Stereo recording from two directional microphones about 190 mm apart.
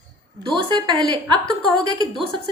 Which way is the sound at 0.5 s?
25° right (ahead or behind).